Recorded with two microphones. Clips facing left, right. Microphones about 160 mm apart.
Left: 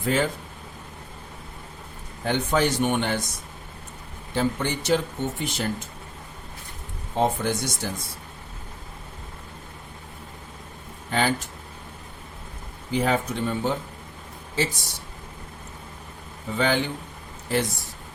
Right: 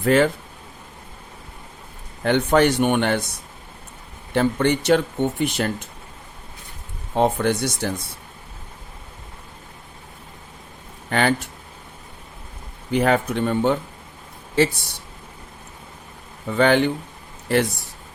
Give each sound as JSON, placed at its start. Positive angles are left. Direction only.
{"t": 0.0, "sound": "speech", "side_deg": -65}
{"t": 2.2, "sound": "speech", "side_deg": -65}
{"t": 4.4, "sound": "speech", "side_deg": -65}
{"t": 7.2, "sound": "speech", "side_deg": -65}
{"t": 11.1, "sound": "speech", "side_deg": -65}
{"t": 12.9, "sound": "speech", "side_deg": -65}
{"t": 16.5, "sound": "speech", "side_deg": -60}